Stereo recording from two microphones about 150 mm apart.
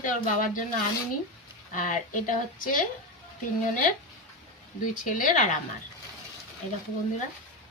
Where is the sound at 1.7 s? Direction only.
60° left (ahead or behind).